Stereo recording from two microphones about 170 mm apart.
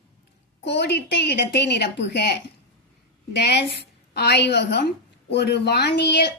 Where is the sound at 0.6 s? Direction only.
90° left.